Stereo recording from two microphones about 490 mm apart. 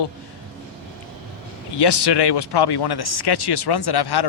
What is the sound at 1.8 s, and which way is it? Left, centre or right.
Speech, left.